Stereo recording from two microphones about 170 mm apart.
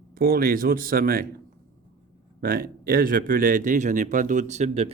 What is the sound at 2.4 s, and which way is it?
Speech, 60° right (ahead or behind).